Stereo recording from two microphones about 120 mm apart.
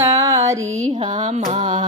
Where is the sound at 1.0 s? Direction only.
55° right (ahead or behind).